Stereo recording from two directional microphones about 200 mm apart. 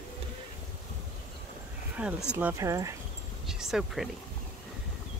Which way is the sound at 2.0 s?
5° right (ahead or behind).